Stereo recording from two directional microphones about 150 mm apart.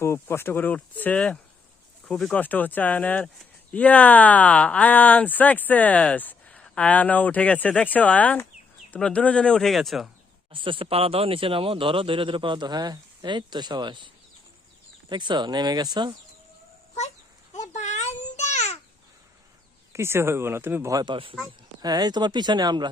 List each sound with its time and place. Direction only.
0.0 s speech: 15° left (ahead or behind); by 10.1 s centre (ahead or behind)
10.5 s speech: 35° right (ahead or behind)
15.1 s speech: 30° right (ahead or behind)
17.5 s a sound: 50° left (ahead or behind)
19.9 s speech: 15° right (ahead or behind)
21.0 s speech: 35° right (ahead or behind)